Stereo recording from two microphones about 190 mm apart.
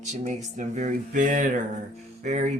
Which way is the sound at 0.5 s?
40° right (ahead or behind).